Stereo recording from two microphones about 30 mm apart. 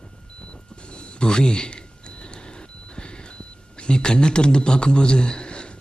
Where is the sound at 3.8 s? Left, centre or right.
Left.